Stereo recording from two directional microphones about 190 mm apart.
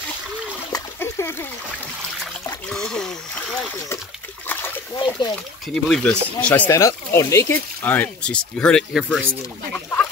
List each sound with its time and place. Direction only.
0.7 s splash: 15° left (ahead or behind)
2.7 s speech: 5° left (ahead or behind)
4.5 s splash: 20° left (ahead or behind)
5.9 s speech: centre (ahead or behind)
9.7 s chicken: 5° left (ahead or behind)